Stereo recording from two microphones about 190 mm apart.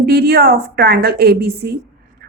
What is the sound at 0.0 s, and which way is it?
A woman's voice, 55° right (ahead or behind).